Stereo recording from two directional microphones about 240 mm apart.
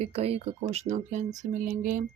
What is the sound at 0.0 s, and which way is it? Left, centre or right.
Speech, right.